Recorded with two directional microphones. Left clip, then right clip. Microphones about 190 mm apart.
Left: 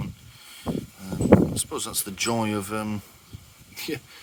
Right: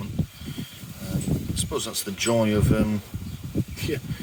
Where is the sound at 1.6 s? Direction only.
50° left (ahead or behind).